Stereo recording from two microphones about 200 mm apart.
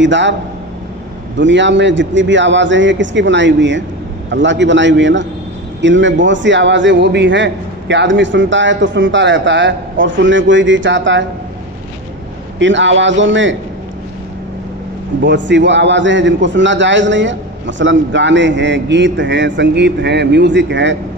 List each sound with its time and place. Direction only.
0.0 s a man's voice: 65° right (ahead or behind)
1.4 s a man's voice: 65° right (ahead or behind)
12.5 s a man's voice: 65° right (ahead or behind)
15.2 s a man's voice: 60° right (ahead or behind)